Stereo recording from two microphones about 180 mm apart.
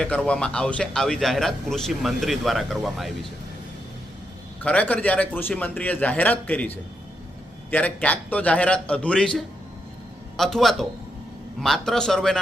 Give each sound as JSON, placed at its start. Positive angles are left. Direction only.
{"t": 0.0, "sound": "a man's voice", "side_deg": 5}
{"t": 4.6, "sound": "a man's voice", "side_deg": 5}